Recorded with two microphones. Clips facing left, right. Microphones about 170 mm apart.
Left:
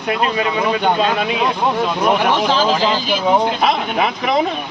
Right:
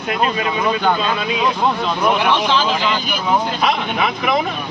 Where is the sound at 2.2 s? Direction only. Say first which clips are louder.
Left 1 dB; 45° left (ahead or behind).